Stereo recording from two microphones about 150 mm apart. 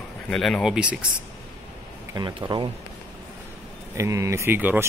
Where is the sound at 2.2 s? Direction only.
30° right (ahead or behind).